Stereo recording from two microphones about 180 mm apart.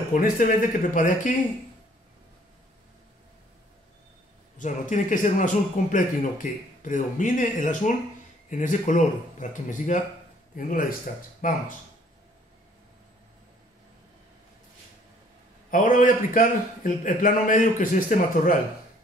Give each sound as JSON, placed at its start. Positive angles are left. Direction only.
{"t": 0.1, "sound": "a man's voice", "side_deg": 50}
{"t": 4.6, "sound": "a man's voice", "side_deg": 45}
{"t": 15.7, "sound": "a man's voice", "side_deg": 50}